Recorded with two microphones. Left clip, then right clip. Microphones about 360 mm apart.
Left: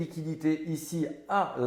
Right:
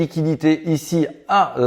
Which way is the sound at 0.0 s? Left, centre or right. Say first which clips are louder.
Right 13 dB; right.